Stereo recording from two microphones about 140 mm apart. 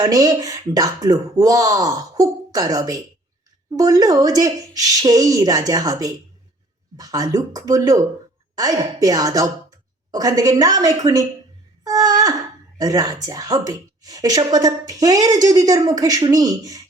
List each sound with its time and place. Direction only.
0.0 s a woman's voice: 25° right (ahead or behind)
11.8 s wail: 25° right (ahead or behind)
12.8 s speech: 25° right (ahead or behind)